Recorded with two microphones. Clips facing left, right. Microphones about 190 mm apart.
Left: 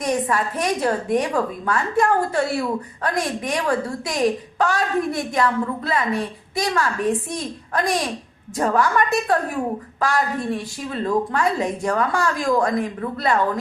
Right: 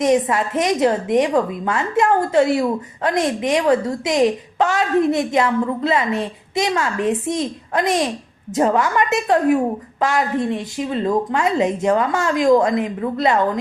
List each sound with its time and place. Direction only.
0.0 s a woman's voice: 20° right (ahead or behind)
8.5 s a woman's voice: 20° right (ahead or behind)